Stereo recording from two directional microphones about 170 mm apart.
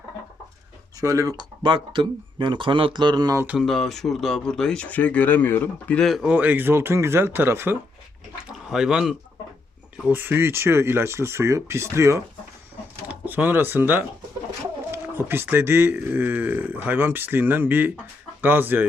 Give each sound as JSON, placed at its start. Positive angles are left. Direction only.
{"t": 1.0, "sound": "speech", "side_deg": -20}
{"t": 3.4, "sound": "speech", "side_deg": -5}